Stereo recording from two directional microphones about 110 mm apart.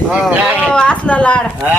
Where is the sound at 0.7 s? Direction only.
10° left (ahead or behind).